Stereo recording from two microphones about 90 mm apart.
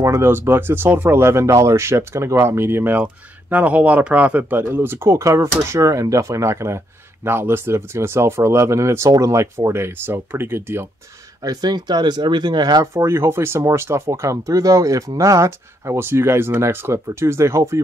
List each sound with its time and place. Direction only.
0.0 s speech: 30° right (ahead or behind)
5.1 s speech: 35° right (ahead or behind)
11.4 s speech: 50° right (ahead or behind)
12.9 s speech: 30° right (ahead or behind)